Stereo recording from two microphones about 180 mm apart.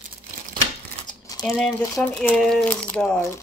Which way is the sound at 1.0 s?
20° left (ahead or behind).